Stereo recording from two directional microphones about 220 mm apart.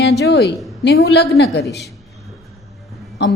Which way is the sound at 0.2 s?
50° left (ahead or behind).